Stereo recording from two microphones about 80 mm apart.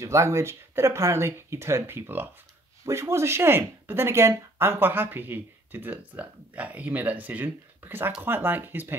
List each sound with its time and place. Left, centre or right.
0.0 s speech: right